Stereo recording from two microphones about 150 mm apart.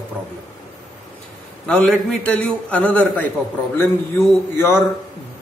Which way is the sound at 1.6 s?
5° left (ahead or behind).